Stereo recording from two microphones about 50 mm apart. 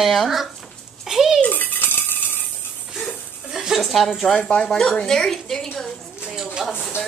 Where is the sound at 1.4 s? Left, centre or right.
Left.